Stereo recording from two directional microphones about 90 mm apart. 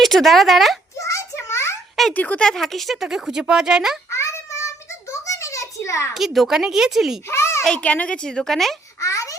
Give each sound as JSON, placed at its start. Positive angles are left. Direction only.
{"t": 0.0, "sound": "speech", "side_deg": 0}
{"t": 0.9, "sound": "a sound", "side_deg": 35}
{"t": 2.1, "sound": "speech", "side_deg": 15}
{"t": 2.5, "sound": "speech", "side_deg": 0}
{"t": 4.1, "sound": "a sound", "side_deg": 35}
{"t": 6.1, "sound": "speech", "side_deg": 0}
{"t": 7.3, "sound": "a sound", "side_deg": 30}
{"t": 7.6, "sound": "speech", "side_deg": 10}
{"t": 9.0, "sound": "babbling", "side_deg": 35}